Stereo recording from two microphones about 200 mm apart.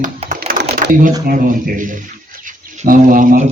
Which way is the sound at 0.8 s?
40° right (ahead or behind).